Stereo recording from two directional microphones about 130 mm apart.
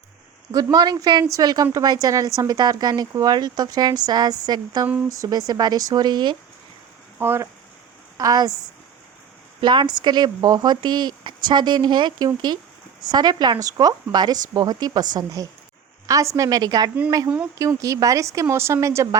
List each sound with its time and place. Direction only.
0.5 s speech: 30° right (ahead or behind)
7.2 s speech: 20° right (ahead or behind)
8.2 s speech: 30° right (ahead or behind)
9.6 s a woman's voice: 35° right (ahead or behind)